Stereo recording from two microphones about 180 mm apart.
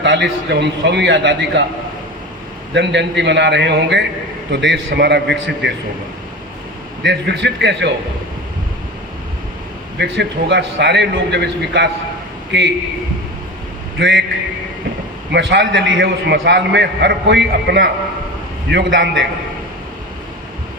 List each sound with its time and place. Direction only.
0.0 s a man's voice: 75° right (ahead or behind)
2.7 s a man's voice: 75° right (ahead or behind)
7.0 s a man's voice: 75° right (ahead or behind)
10.0 s a man's voice: 70° right (ahead or behind)
14.0 s a man's voice: 80° right
15.3 s a man's voice: 85° right